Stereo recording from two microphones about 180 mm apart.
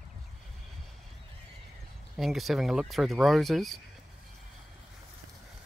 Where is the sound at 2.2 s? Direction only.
Centre (ahead or behind).